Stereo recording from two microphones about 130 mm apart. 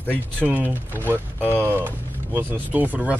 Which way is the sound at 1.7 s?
15° right (ahead or behind).